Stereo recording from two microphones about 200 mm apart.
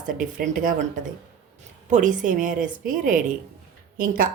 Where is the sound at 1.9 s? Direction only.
40° right (ahead or behind).